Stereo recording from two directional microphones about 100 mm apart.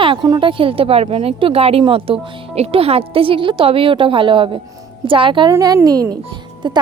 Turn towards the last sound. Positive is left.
turn(degrees=-50)  # may be behind; listen again after turning